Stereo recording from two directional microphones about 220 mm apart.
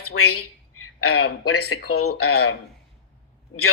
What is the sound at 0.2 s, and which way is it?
Speech, 90° left.